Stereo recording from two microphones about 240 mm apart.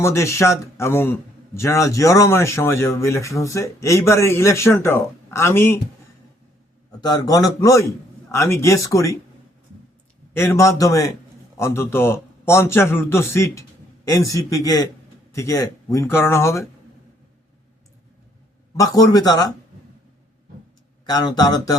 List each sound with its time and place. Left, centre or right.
0.0 s a man's voice: centre
7.0 s a man's voice: centre
10.3 s a man's voice: centre
18.8 s a man's voice: centre
21.1 s a man's voice: centre